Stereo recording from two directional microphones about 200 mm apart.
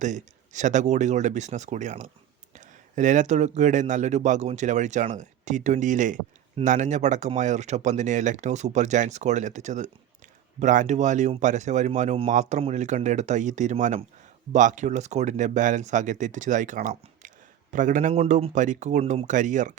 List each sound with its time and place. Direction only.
0.0 s speech: 40° right (ahead or behind)